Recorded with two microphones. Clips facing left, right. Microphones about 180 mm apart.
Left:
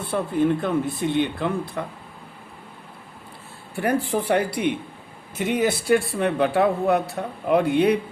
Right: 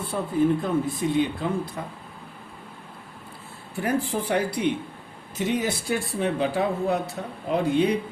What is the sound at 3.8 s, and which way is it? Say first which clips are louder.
Speech: left 3 dB; 60° left (ahead or behind).